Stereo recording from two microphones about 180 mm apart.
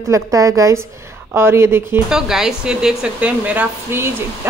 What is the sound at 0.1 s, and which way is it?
A woman's voice, 20° right (ahead or behind).